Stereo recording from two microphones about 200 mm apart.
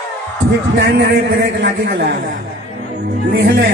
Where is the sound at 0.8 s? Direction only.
55° right (ahead or behind).